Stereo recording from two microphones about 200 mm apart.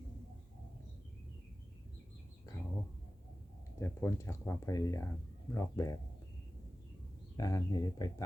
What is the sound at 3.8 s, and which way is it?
Speech, 15° left (ahead or behind).